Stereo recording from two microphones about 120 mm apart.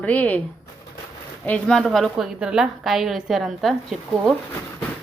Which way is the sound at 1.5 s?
10° left (ahead or behind).